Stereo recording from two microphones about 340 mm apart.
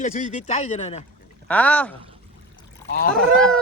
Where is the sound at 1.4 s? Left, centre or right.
Centre.